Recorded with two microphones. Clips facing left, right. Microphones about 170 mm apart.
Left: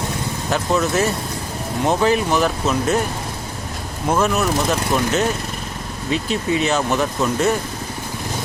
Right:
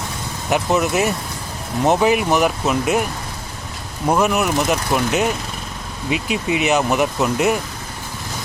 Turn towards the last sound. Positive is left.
turn(degrees=-15)  # may be behind; listen again after turning